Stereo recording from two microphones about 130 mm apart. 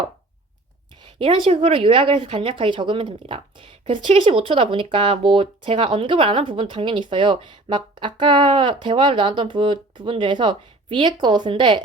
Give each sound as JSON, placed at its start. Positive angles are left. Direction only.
{"t": 0.9, "sound": "a woman's voice", "side_deg": -40}